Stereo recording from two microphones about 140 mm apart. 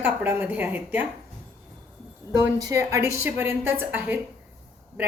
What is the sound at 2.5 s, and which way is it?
A woman's voice, 25° right (ahead or behind).